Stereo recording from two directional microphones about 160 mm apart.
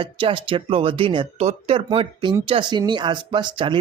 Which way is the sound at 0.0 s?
35° right (ahead or behind).